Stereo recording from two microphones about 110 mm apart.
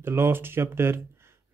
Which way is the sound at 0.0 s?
20° right (ahead or behind).